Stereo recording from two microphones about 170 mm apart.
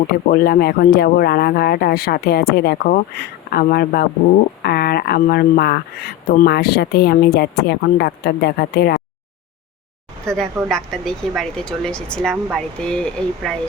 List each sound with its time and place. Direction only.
0.1 s speech: 60° left (ahead or behind)
10.2 s speech: 5° left (ahead or behind)